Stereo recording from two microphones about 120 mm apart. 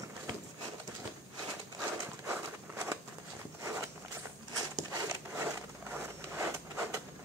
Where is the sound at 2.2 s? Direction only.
20° right (ahead or behind).